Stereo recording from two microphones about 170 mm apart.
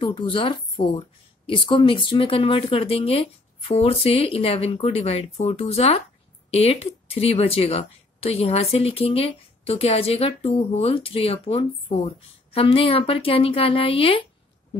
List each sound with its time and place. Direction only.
0.0 s speech: 30° left (ahead or behind)